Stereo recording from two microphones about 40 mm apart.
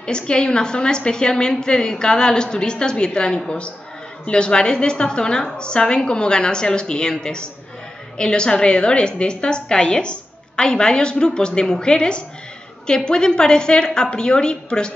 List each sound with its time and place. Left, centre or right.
0.0 s a woman's voice: left